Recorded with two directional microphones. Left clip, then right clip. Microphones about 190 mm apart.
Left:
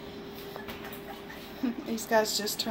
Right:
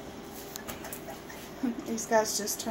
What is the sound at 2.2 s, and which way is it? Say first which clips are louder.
Speech: left 2 dB; 15° left (ahead or behind).